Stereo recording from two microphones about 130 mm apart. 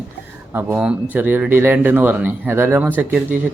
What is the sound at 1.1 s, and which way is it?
Speech, 15° right (ahead or behind).